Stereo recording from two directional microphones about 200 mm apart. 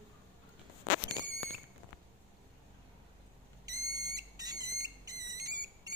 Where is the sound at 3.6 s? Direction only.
20° right (ahead or behind).